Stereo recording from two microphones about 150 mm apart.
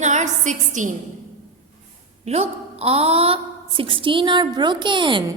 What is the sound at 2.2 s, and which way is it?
A woman's voice, 45° right (ahead or behind).